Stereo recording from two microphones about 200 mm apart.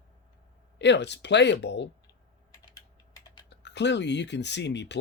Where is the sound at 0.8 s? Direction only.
60° left (ahead or behind).